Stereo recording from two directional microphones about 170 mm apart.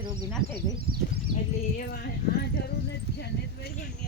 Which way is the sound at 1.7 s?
65° left (ahead or behind).